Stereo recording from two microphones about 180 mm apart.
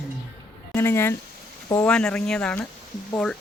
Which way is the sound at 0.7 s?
15° left (ahead or behind).